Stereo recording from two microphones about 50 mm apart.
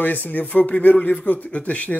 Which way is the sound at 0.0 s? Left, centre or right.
Left.